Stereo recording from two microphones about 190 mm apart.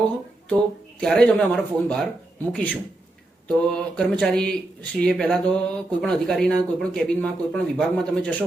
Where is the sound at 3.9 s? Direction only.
5° left (ahead or behind).